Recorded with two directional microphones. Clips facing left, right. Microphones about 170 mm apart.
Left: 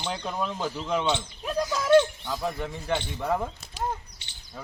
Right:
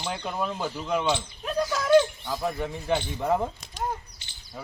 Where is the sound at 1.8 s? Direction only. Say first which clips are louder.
Even; centre (ahead or behind).